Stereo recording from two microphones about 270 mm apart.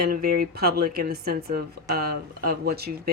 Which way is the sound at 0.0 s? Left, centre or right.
Right.